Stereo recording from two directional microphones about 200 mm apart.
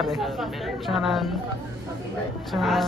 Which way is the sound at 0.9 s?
Centre (ahead or behind).